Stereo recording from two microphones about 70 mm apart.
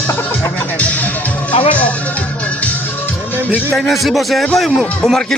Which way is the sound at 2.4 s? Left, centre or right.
Centre.